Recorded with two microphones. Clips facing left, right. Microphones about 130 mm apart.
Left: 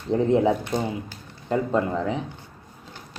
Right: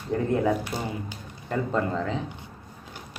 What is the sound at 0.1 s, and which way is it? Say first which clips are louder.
Speech: left 4 dB; 20° left (ahead or behind).